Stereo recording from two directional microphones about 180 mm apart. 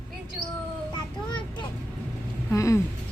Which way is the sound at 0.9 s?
25° left (ahead or behind).